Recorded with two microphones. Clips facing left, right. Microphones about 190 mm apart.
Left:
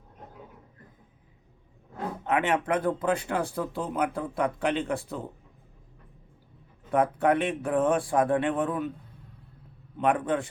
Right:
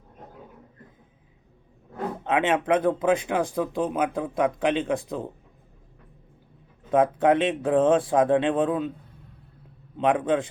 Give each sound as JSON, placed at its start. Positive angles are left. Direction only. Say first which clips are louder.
{"t": 2.2, "sound": "speech", "louder": "right 3 dB", "side_deg": -20}
{"t": 6.9, "sound": "speech", "louder": "right 4 dB", "side_deg": -20}
{"t": 10.0, "sound": "speech", "louder": "right 3 dB", "side_deg": -20}